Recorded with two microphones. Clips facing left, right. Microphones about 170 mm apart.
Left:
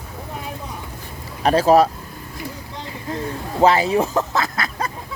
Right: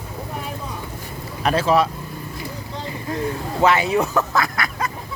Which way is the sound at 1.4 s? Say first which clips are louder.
Left 4 dB; 40° left (ahead or behind).